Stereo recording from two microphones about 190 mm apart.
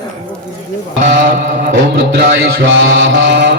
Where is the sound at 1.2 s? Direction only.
50° right (ahead or behind).